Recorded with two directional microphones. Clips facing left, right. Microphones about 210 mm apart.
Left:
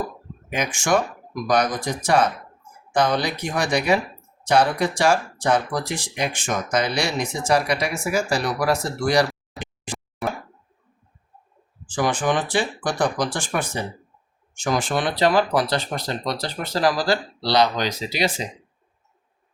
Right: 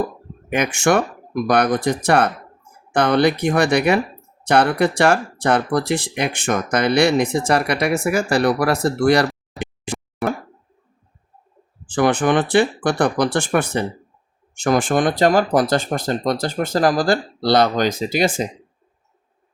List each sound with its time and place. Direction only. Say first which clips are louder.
0.5 s speech: right 4 dB; 60° right (ahead or behind)
9.8 s a sound: right 5 dB; 60° right (ahead or behind)
11.9 s speech: right 5 dB; 60° right (ahead or behind)